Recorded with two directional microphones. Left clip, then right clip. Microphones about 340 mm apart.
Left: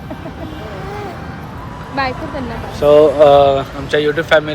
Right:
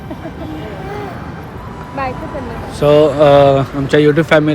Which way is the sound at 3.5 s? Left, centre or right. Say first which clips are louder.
Right 4 dB; centre.